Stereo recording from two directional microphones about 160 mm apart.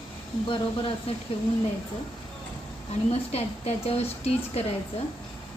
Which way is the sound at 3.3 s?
40° left (ahead or behind).